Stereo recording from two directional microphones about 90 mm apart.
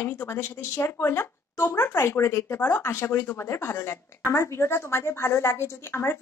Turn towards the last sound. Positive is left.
turn(degrees=30)  # may be behind; listen again after turning